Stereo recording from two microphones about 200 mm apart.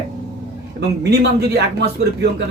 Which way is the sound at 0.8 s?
55° right (ahead or behind).